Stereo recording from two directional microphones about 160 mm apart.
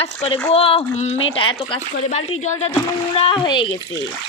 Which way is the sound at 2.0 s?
45° left (ahead or behind).